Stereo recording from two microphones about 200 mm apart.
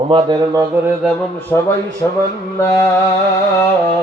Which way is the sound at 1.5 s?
10° left (ahead or behind).